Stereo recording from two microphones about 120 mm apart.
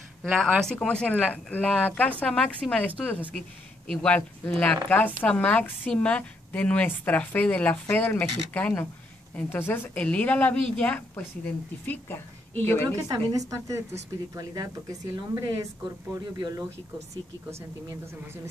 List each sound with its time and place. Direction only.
0.2 s a woman's voice: centre (ahead or behind); by 12.8 s 15° left (ahead or behind)
12.8 s a woman's voice: 30° right (ahead or behind)
17.1 s speech: 20° right (ahead or behind)